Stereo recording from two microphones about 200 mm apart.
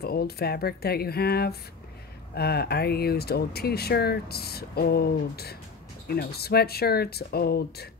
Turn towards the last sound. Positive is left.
turn(degrees=50)  # may be behind; listen again after turning